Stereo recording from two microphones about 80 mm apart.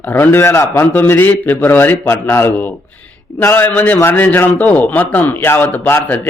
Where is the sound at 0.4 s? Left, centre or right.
Left.